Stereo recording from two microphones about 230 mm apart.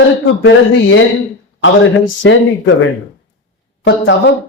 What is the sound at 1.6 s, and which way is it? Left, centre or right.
Speech, left.